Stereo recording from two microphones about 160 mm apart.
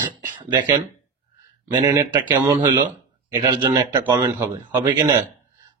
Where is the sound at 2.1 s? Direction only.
25° right (ahead or behind).